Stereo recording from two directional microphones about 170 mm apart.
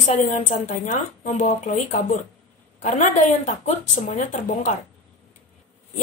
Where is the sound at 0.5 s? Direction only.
50° left (ahead or behind).